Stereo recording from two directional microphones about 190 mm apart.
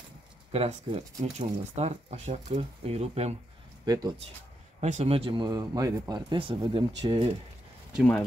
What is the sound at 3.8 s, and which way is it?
Speech, 20° right (ahead or behind).